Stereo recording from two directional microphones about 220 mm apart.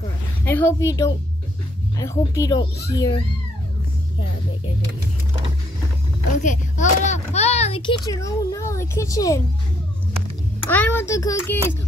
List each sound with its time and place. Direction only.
0.5 s a child's voice: 10° left (ahead or behind)
6.4 s a child's voice: 35° left (ahead or behind); by 9.4 s 15° left (ahead or behind)
10.6 s a child's voice: 10° left (ahead or behind)